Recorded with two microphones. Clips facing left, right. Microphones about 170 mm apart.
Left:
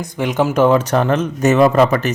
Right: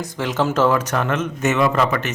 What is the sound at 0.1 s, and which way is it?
Speech, 15° left (ahead or behind).